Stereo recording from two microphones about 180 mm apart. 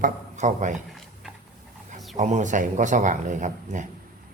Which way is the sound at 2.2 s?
40° right (ahead or behind).